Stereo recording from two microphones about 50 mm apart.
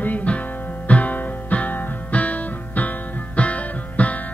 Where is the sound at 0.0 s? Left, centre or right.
Left.